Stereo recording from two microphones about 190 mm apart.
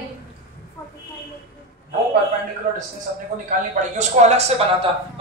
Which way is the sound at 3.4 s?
40° right (ahead or behind).